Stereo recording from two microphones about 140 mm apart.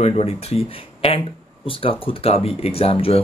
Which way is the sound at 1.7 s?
40° left (ahead or behind).